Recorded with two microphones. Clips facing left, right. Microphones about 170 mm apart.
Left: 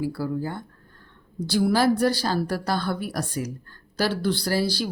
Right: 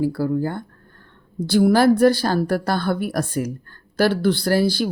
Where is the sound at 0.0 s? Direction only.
50° right (ahead or behind).